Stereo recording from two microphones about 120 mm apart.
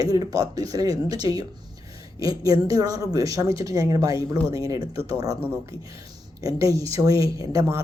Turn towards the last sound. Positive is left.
turn(degrees=-30)  # may be behind; listen again after turning